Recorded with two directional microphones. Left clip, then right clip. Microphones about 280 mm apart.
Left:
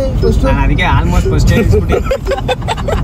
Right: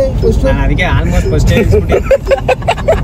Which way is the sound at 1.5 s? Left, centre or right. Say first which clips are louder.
Right 3 dB; centre.